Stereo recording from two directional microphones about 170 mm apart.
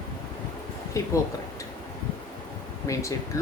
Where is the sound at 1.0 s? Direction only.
20° left (ahead or behind).